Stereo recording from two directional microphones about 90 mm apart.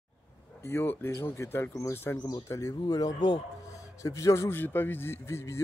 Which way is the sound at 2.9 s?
50° left (ahead or behind).